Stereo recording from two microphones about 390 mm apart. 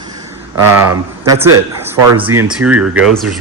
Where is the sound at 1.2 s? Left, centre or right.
Centre.